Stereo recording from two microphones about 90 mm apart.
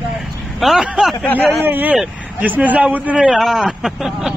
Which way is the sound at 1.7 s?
20° right (ahead or behind).